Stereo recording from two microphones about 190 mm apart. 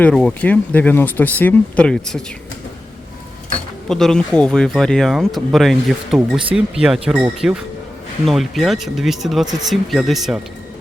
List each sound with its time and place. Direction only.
0.0 s speech: 5° left (ahead or behind)
3.8 s speech: centre (ahead or behind)